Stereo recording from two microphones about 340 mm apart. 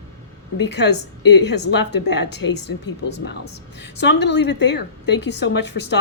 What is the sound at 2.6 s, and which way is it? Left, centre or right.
Speech, left.